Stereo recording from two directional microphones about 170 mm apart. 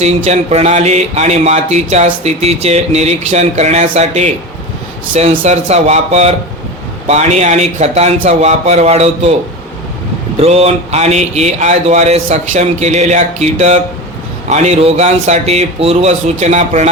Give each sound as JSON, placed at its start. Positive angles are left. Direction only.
{"t": 0.0, "sound": "speech", "side_deg": -40}
{"t": 10.4, "sound": "speech", "side_deg": -35}